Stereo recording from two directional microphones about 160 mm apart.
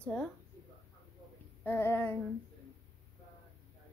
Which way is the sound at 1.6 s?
15° left (ahead or behind).